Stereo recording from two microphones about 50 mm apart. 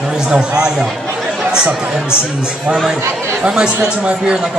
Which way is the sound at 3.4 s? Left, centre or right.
Centre.